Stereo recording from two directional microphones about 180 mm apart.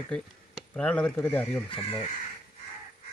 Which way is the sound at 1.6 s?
30° left (ahead or behind).